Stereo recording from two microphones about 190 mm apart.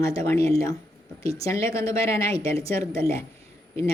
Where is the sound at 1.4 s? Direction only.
15° left (ahead or behind).